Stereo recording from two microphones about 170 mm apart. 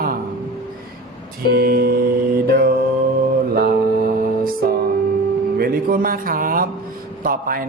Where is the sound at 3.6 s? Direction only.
60° right (ahead or behind).